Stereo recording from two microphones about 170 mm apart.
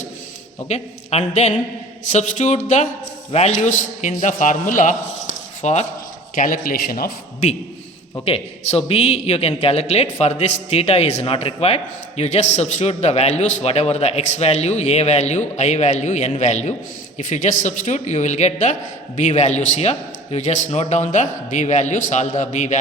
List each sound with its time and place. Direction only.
0.7 s a man's voice: 40° left (ahead or behind)
6.3 s speech: 55° left (ahead or behind)
8.2 s a man's voice: 35° left (ahead or behind)